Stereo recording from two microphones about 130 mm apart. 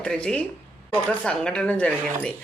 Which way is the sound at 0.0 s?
5° left (ahead or behind).